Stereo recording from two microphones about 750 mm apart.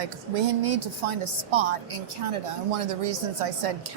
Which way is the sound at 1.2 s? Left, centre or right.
Right.